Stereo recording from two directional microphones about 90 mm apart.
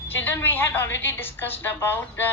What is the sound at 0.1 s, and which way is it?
A woman's voice, 25° left (ahead or behind).